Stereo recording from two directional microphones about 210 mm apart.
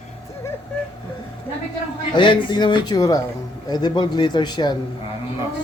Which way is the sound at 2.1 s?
20° left (ahead or behind).